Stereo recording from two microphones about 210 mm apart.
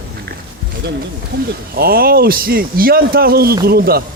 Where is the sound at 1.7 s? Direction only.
45° right (ahead or behind).